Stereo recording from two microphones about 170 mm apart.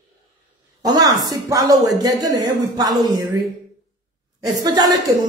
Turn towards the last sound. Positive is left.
turn(degrees=-25)  # may be behind; listen again after turning